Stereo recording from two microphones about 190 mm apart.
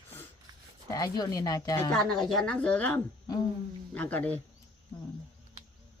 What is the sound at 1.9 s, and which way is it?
A woman's voice, centre (ahead or behind).